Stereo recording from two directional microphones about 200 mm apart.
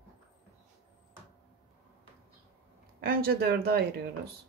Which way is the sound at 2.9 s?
50° right (ahead or behind).